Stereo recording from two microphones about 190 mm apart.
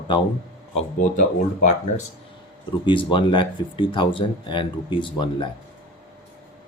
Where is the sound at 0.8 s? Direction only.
45° left (ahead or behind).